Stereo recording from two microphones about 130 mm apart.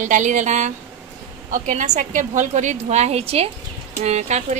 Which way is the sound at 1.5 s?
80° right.